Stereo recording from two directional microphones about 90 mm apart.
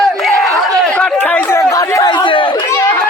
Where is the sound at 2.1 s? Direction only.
65° left (ahead or behind).